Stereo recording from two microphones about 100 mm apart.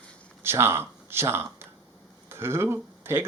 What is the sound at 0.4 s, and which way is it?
Speech, 25° right (ahead or behind).